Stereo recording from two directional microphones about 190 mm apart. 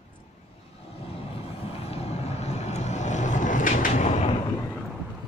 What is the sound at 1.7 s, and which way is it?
Vehicle, 30° left (ahead or behind).